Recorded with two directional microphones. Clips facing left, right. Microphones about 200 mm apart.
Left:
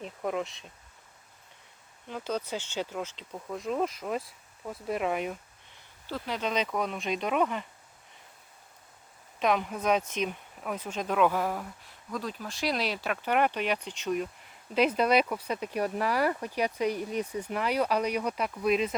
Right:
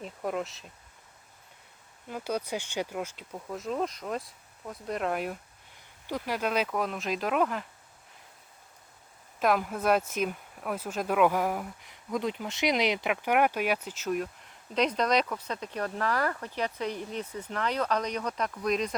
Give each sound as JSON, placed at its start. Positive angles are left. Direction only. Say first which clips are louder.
{"t": 0.0, "sound": "speech", "louder": "left 1 dB", "side_deg": 0}
{"t": 2.0, "sound": "speech", "louder": "right 1 dB", "side_deg": -10}
{"t": 6.1, "sound": "speech", "louder": "right 2 dB", "side_deg": -15}
{"t": 9.4, "sound": "speech", "louder": "right 1 dB", "side_deg": -5}